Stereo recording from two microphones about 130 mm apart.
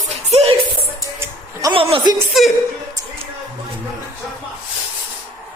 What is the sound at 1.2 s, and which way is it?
Music, 25° right (ahead or behind).